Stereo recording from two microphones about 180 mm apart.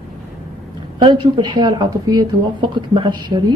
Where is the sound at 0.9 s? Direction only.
25° right (ahead or behind).